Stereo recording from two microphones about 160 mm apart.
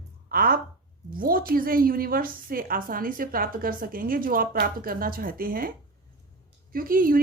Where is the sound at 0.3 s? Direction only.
65° right (ahead or behind).